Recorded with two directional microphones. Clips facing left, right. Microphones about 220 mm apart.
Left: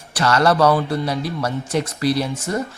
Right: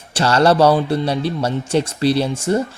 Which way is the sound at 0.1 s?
30° right (ahead or behind).